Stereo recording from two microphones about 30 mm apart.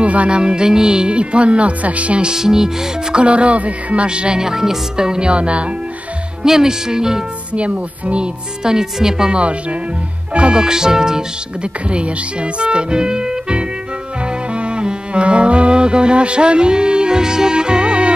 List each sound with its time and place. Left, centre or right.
0.0 s music: right
0.3 s speech: right
2.3 s speech: centre
3.2 s speech: right
4.4 s speech: centre
5.3 s speech: right
6.4 s speech: centre
7.5 s speech: right
8.6 s speech: right
9.3 s speech: right
10.5 s speech: right
11.6 s speech: right
14.5 s music: right